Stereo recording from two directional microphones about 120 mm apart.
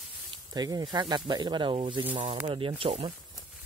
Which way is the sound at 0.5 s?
35° right (ahead or behind).